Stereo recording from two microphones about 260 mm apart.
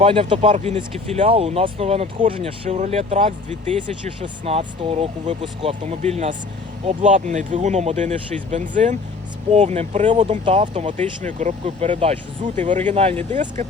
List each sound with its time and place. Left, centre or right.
0.0 s speech: centre